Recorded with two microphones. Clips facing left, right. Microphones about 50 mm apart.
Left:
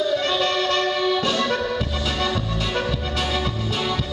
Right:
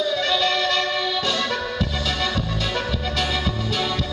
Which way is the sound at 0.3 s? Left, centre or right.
Left.